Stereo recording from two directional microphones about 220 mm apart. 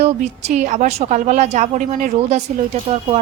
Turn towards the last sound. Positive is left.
turn(degrees=-30)  # may be behind; listen again after turning